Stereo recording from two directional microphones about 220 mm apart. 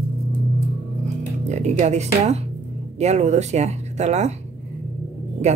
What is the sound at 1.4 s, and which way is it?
Speech, 30° right (ahead or behind).